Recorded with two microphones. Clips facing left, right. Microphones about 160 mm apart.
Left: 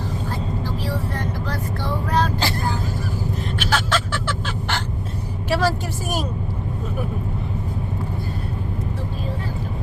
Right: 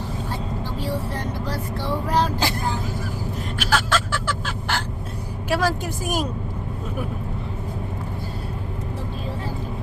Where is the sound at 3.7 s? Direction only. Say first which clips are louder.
Right 1 dB; 5° right (ahead or behind).